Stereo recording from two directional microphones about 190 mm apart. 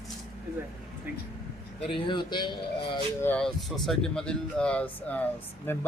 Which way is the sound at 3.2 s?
5° left (ahead or behind).